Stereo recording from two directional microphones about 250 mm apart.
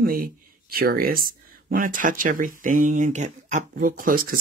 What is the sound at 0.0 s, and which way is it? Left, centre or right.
Speech, right.